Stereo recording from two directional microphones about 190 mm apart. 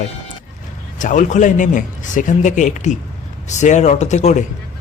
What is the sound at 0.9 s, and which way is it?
Speech, 40° left (ahead or behind).